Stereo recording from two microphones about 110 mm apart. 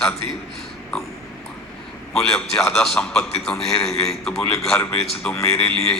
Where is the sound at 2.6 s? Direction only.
5° left (ahead or behind).